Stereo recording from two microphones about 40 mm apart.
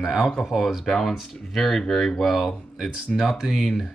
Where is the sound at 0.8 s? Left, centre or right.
Centre.